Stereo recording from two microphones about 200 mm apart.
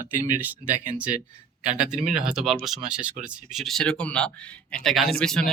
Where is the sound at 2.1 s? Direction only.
Centre (ahead or behind).